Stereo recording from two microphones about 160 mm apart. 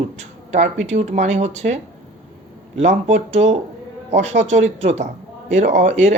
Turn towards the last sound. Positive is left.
turn(degrees=-45)  # may be behind; listen again after turning